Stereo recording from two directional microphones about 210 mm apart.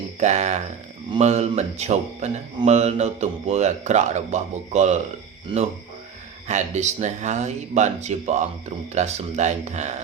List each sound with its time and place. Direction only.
0.2 s a man's voice: 35° right (ahead or behind)
6.5 s a man's voice: 35° right (ahead or behind)